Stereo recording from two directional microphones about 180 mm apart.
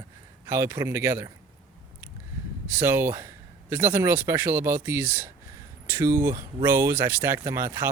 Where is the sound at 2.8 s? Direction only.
15° right (ahead or behind).